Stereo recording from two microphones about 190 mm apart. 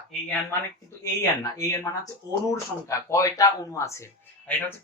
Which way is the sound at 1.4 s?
20° left (ahead or behind).